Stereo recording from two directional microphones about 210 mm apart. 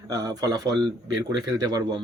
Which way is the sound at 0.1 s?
20° right (ahead or behind).